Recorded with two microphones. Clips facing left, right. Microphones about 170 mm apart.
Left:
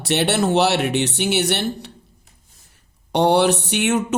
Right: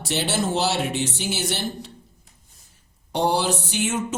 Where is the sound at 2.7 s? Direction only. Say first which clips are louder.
Left 6 dB; 70° left (ahead or behind).